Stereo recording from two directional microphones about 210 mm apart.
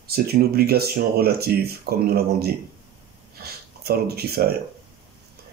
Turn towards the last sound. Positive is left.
turn(degrees=-50)  # may be behind; listen again after turning